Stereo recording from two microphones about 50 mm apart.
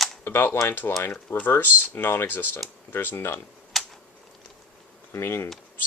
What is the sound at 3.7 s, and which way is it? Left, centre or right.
Tick-tock, centre.